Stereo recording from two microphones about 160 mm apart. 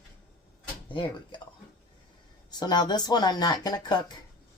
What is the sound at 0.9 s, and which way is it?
Speech, 30° left (ahead or behind).